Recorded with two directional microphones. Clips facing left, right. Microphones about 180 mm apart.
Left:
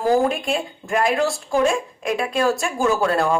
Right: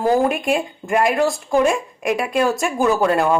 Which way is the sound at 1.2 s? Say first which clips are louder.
Right 3 dB; 15° right (ahead or behind).